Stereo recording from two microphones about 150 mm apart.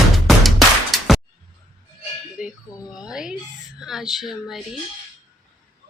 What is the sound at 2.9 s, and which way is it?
Speech, 5° right (ahead or behind).